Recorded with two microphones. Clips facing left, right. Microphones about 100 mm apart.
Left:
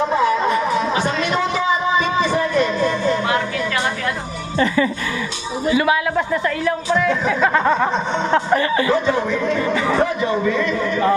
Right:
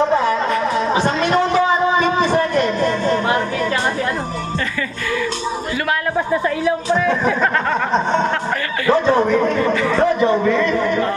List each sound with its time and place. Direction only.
0.9 s a sound: 35° right (ahead or behind)
5.7 s a man's voice: 10° left (ahead or behind)
6.1 s speech: 10° right (ahead or behind)
7.3 s speech: 5° left (ahead or behind)
8.9 s speech: 35° right (ahead or behind)